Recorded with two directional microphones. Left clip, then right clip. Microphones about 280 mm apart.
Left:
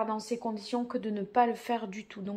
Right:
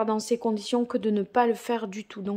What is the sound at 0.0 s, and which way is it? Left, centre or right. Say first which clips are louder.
Speech: right 7 dB; right.